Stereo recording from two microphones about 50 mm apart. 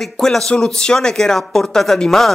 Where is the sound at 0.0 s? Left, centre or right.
Centre.